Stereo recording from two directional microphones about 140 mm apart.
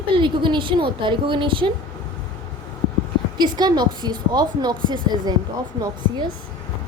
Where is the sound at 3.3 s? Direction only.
30° right (ahead or behind).